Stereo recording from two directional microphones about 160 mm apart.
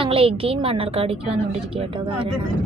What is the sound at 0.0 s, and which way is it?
A woman's voice, 35° right (ahead or behind).